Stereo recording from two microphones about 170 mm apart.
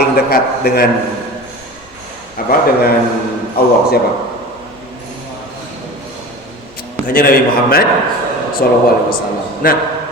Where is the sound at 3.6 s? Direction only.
60° left (ahead or behind).